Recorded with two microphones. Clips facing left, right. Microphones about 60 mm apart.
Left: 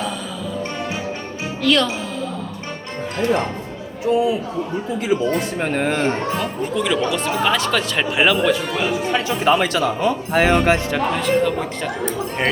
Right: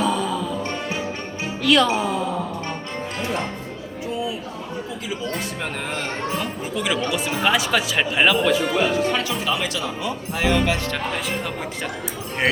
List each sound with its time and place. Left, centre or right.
0.0 s music: centre
1.6 s speech: centre
5.5 s speech: left
6.4 s speech: centre
9.2 s speech: left
11.1 s speech: centre